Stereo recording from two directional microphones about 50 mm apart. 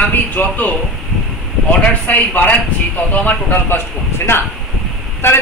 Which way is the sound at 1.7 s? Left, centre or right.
Left.